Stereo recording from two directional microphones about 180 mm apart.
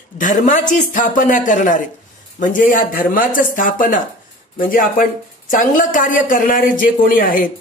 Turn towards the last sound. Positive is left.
turn(degrees=50)  # may be behind; listen again after turning